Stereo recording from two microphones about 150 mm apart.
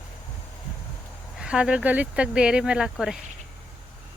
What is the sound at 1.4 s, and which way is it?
Speech, 5° right (ahead or behind).